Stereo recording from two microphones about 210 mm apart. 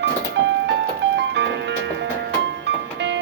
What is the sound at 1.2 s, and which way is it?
Music, 55° right (ahead or behind).